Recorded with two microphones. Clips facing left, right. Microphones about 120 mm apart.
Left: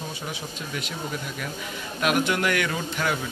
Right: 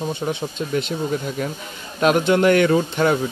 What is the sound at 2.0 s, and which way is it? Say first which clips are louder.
A man's voice: right 8 dB; 30° right (ahead or behind).